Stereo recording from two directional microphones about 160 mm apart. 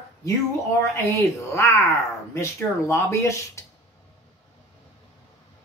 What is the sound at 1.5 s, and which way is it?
Speech, 20° left (ahead or behind).